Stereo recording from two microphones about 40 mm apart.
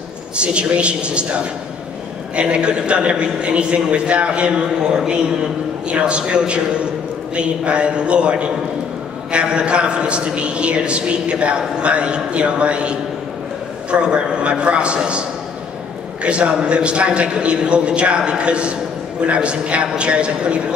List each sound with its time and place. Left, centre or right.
0.4 s a man's voice: right
2.3 s a man's voice: right